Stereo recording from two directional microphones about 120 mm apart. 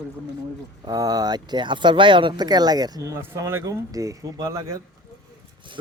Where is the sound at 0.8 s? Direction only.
35° right (ahead or behind).